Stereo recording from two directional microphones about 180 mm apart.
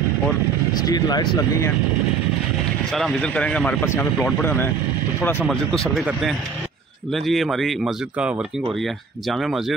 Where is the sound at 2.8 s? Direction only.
Centre (ahead or behind).